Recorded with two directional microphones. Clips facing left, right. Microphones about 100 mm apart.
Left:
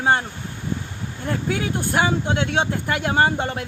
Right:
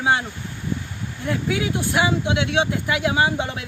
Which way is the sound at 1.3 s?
40° left (ahead or behind).